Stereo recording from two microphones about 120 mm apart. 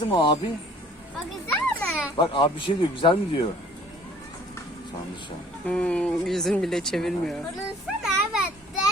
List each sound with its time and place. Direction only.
0.0 s speech: 40° left (ahead or behind)
1.5 s a child's voice: 10° left (ahead or behind)
2.1 s speech: 40° left (ahead or behind)
5.6 s speech: 10° left (ahead or behind)
8.0 s a sound: 5° right (ahead or behind)